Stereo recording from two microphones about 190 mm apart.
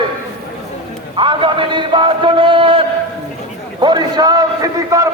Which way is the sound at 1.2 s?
25° right (ahead or behind).